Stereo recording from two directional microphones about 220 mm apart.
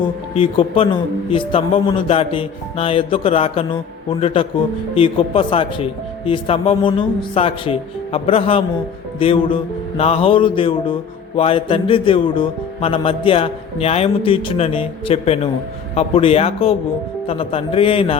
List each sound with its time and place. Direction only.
0.3 s speech: 25° left (ahead or behind)